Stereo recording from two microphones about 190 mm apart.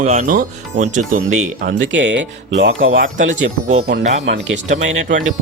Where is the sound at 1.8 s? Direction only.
70° right (ahead or behind).